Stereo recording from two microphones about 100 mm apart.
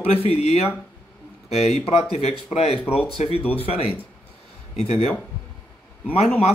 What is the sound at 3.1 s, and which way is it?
Speech, 80° left.